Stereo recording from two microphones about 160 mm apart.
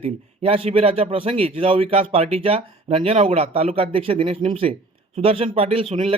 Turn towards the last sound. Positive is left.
turn(degrees=-35)  # may be behind; listen again after turning